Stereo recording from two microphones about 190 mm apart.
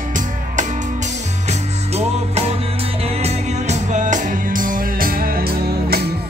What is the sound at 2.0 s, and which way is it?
Music, 35° right (ahead or behind).